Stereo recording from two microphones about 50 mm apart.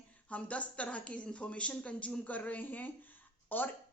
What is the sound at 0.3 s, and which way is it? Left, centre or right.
A woman's voice, left.